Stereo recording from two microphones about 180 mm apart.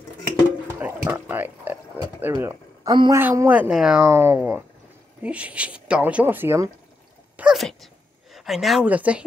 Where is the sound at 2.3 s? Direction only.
15° right (ahead or behind).